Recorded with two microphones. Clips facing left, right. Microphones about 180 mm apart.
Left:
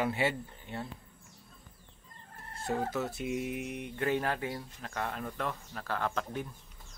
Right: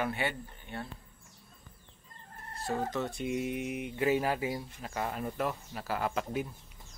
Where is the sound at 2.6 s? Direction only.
15° left (ahead or behind); by 6.5 s 10° right (ahead or behind).